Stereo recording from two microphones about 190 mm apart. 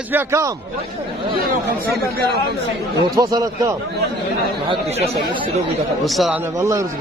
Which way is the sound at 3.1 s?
20° right (ahead or behind).